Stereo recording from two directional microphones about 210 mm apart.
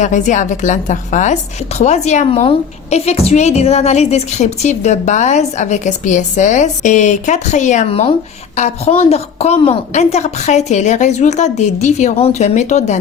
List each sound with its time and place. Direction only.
0.0 s a woman's voice: 35° left (ahead or behind)